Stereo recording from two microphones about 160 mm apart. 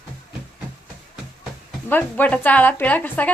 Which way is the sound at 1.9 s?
10° left (ahead or behind).